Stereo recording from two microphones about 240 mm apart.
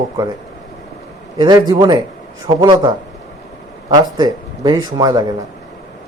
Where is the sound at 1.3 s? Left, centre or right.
Centre.